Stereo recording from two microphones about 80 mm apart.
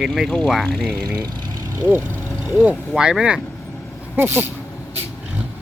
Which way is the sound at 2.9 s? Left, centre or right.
Centre.